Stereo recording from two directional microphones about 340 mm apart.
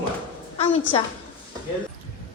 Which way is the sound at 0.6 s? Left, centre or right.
Centre.